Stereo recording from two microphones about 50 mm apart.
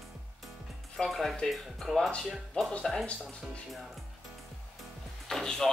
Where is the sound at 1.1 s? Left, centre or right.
Centre.